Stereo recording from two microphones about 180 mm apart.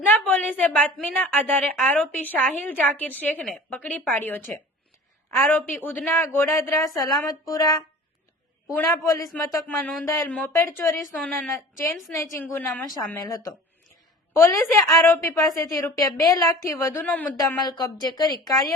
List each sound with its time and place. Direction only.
0.0 s a woman's voice: 10° left (ahead or behind)
11.2 s speech: 5° left (ahead or behind)
12.1 s a woman's voice: 15° left (ahead or behind)
17.6 s a woman's voice: 20° left (ahead or behind)